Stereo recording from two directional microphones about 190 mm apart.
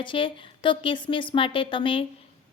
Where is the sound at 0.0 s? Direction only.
25° left (ahead or behind).